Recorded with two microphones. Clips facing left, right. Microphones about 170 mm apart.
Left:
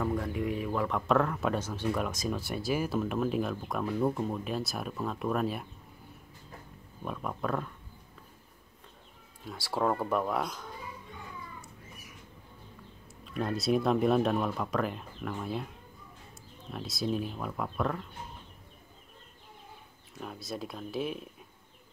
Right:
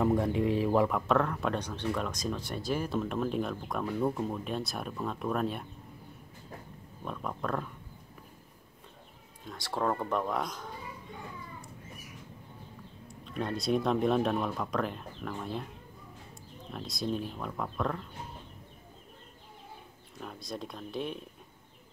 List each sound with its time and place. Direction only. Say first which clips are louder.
0.0 s speech: right 4 dB; 25° right (ahead or behind)
0.8 s speech: even; centre (ahead or behind)
7.1 s speech: left 1 dB; 5° left (ahead or behind)
9.4 s speech: left 2 dB; 5° left (ahead or behind)
13.1 s speech: left 1 dB; 5° left (ahead or behind)
16.7 s speech: left 2 dB; 5° left (ahead or behind)
20.2 s speech: left 1 dB; 5° left (ahead or behind)